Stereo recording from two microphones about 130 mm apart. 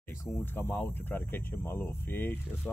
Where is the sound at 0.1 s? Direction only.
20° left (ahead or behind).